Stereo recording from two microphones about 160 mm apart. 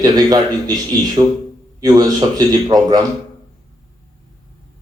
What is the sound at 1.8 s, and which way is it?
Speech, 25° right (ahead or behind).